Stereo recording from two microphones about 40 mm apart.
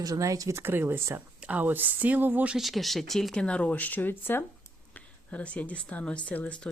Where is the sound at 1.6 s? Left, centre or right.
Right.